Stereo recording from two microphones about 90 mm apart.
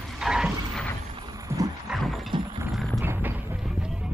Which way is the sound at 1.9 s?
Centre (ahead or behind).